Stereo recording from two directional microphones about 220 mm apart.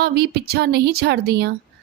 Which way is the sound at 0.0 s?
45° right (ahead or behind).